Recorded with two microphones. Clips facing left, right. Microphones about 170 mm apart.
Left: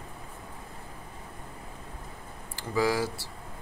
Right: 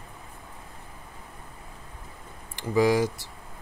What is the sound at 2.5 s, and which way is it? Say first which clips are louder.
Speech: right 5 dB; 20° right (ahead or behind).